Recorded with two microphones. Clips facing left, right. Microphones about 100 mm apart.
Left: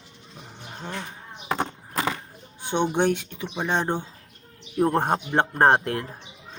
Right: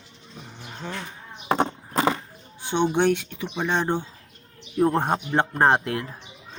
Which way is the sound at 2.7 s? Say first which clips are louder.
Right 1 dB; 15° left (ahead or behind).